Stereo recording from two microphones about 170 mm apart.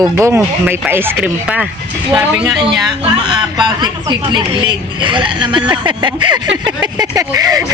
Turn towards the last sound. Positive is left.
turn(degrees=-20)  # may be behind; listen again after turning